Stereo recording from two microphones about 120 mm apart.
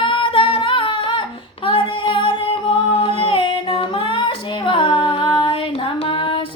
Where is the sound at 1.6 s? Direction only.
45° left (ahead or behind).